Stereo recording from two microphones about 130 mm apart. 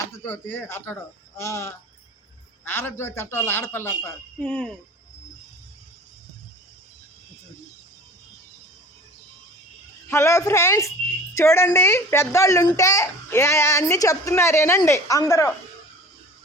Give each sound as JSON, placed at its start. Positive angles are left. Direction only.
{"t": 0.3, "sound": "a child's voice", "side_deg": 15}
{"t": 4.4, "sound": "speech", "side_deg": 5}
{"t": 10.1, "sound": "a child's voice", "side_deg": 20}